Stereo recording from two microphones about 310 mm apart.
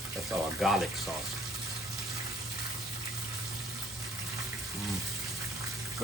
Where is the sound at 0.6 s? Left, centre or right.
Centre.